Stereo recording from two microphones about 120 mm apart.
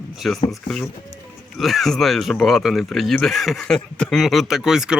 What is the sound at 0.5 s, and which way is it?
Speech, 5° left (ahead or behind).